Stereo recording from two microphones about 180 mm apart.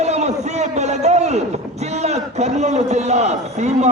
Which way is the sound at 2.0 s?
40° right (ahead or behind).